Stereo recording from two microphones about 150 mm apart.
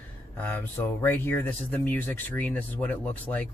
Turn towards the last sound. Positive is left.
turn(degrees=10)  # may be behind; listen again after turning